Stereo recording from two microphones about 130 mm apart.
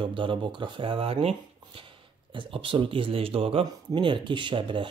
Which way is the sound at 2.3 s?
40° right (ahead or behind).